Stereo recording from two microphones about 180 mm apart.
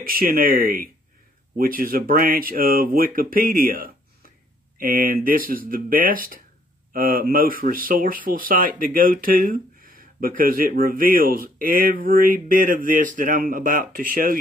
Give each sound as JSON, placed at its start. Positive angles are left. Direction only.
{"t": 0.0, "sound": "speech", "side_deg": -55}